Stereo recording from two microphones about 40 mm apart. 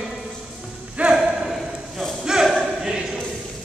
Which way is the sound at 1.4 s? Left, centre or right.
Centre.